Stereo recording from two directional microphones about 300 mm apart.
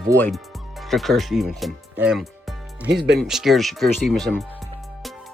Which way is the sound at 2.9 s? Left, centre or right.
Right.